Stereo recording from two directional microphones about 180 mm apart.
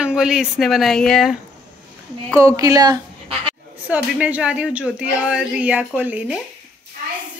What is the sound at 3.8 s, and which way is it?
A woman's voice, 10° right (ahead or behind).